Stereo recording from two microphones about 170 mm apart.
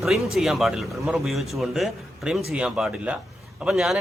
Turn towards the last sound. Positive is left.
turn(degrees=0)  # may be behind; listen again after turning